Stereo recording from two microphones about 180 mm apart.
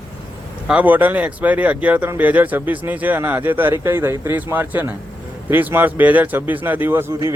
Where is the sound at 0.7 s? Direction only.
10° right (ahead or behind).